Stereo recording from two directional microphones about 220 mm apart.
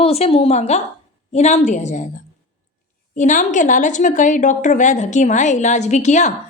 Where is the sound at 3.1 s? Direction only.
35° left (ahead or behind).